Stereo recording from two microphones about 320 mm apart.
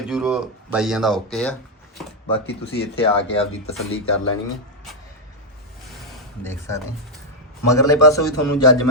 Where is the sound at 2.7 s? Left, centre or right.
Left.